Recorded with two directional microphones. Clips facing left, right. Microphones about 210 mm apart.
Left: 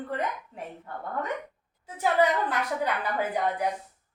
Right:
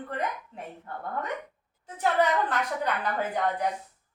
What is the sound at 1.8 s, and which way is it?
A woman's voice, 10° left (ahead or behind).